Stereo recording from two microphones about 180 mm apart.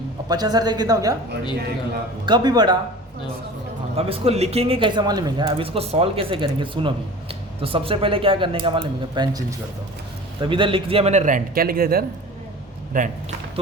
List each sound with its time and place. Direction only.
0.3 s speech: 20° right (ahead or behind)
2.2 s speech: 25° right (ahead or behind)
3.9 s speech: 35° right (ahead or behind)